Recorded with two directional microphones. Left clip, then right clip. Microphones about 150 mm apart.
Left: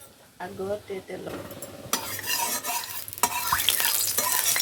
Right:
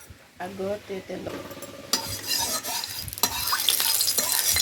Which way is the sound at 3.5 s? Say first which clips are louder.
Left 1 dB; 15° left (ahead or behind).